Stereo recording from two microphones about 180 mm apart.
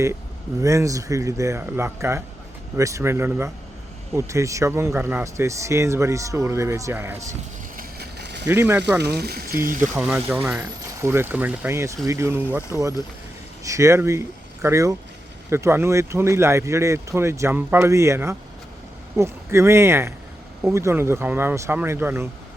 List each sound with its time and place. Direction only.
0.6 s speech: 15° right (ahead or behind)
7.8 s vehicle: 65° right (ahead or behind)
8.4 s speech: 10° right (ahead or behind)
9.0 s speech: 65° right (ahead or behind)
9.9 s speech: 5° right (ahead or behind)